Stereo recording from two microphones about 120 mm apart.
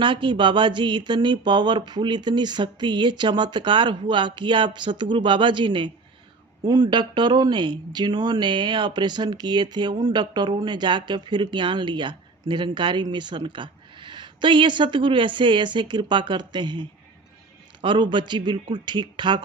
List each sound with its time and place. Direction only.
0.0 s speech: 45° right (ahead or behind)
17.8 s speech: 40° right (ahead or behind)